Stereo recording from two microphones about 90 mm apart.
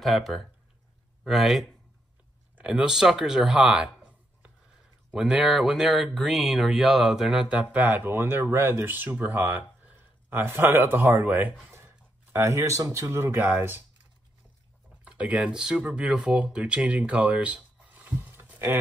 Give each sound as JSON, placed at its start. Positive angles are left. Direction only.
{"t": 0.0, "sound": "speech", "side_deg": 0}
{"t": 2.5, "sound": "speech", "side_deg": -15}
{"t": 5.1, "sound": "speech", "side_deg": -10}
{"t": 15.0, "sound": "speech", "side_deg": -15}